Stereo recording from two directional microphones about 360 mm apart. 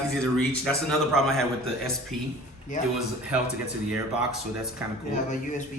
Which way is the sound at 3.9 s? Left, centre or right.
Centre.